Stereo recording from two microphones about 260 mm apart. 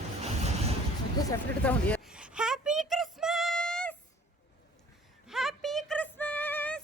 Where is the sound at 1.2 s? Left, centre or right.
Centre.